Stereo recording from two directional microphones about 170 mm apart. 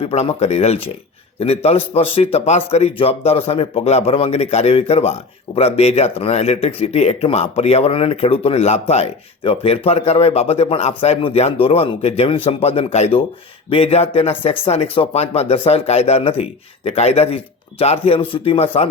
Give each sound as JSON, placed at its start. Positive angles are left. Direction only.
{"t": 0.0, "sound": "speech", "side_deg": 35}